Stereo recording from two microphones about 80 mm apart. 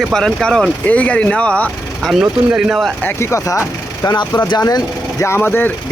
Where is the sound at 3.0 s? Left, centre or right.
Left.